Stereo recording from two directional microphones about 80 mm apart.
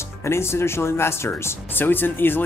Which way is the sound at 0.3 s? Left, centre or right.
Left.